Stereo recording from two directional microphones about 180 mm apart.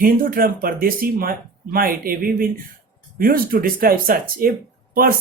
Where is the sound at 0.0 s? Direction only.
55° right (ahead or behind).